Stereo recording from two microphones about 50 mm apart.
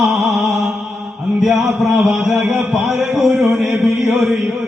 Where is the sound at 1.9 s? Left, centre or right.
Right.